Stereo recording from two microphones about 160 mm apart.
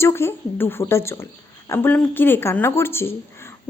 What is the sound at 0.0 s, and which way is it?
A woman's voice, 15° left (ahead or behind).